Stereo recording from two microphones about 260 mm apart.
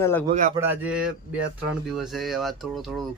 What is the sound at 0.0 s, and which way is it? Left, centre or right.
Speech, centre.